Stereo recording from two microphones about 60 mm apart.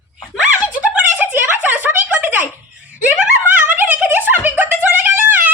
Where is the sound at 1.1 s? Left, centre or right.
Right.